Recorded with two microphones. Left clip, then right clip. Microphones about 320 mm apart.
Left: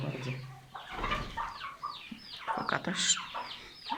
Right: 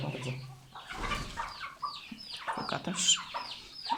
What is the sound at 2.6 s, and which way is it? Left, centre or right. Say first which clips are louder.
Rodents: right 1 dB; centre.